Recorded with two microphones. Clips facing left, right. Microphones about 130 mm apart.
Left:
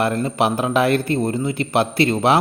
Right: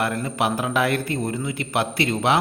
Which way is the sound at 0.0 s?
30° left (ahead or behind).